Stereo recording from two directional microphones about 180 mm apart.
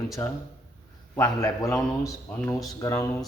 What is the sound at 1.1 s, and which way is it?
Speech, 20° left (ahead or behind).